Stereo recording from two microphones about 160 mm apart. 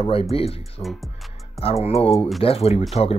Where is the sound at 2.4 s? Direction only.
40° left (ahead or behind).